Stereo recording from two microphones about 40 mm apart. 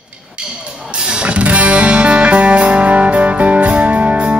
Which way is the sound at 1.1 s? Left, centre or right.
Right.